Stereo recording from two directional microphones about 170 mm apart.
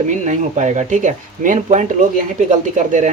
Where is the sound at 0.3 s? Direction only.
45° right (ahead or behind).